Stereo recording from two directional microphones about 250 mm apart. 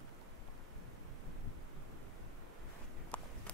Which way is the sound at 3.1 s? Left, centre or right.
Centre.